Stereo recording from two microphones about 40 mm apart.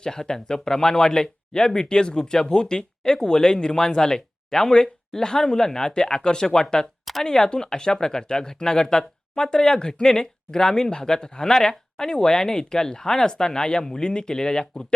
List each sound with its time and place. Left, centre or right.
0.0 s speech: centre